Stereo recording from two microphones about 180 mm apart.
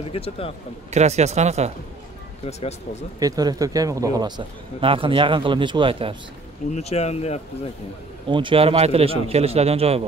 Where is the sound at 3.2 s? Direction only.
20° right (ahead or behind).